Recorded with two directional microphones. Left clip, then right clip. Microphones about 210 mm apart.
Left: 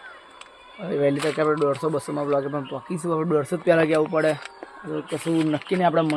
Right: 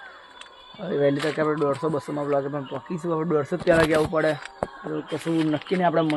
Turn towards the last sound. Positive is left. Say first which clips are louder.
# left 1 dB
turn(degrees=10)  # may be behind; listen again after turning